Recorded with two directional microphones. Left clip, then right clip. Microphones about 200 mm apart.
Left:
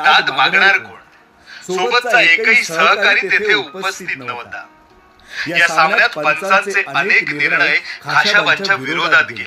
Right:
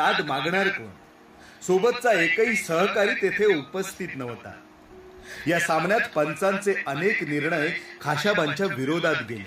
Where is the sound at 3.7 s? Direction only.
Centre (ahead or behind).